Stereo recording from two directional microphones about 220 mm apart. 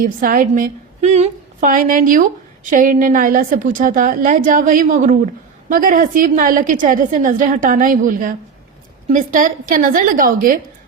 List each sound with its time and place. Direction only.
0.2 s a woman's voice: 40° right (ahead or behind)